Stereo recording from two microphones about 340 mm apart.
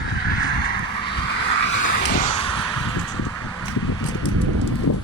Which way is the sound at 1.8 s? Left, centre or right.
Left.